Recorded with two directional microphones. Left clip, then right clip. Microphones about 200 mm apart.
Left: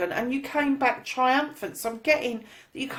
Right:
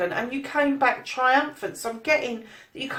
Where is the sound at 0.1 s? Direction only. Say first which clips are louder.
Even; 50° left (ahead or behind).